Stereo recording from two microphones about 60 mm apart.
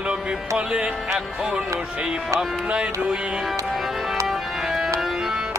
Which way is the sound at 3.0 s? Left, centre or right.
Centre.